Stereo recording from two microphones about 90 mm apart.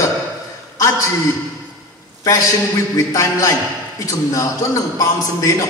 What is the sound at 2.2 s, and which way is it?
A man's voice, 35° left (ahead or behind).